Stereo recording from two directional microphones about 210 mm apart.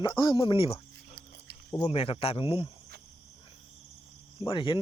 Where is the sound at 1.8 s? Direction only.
25° left (ahead or behind).